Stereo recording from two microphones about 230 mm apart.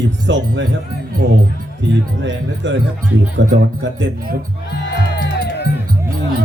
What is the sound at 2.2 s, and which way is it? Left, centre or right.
Speech, right.